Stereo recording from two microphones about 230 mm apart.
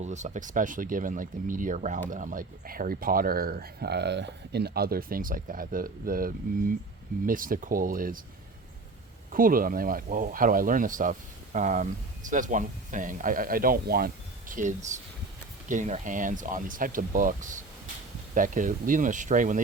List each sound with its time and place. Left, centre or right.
0.0 s speech: right
9.3 s speech: right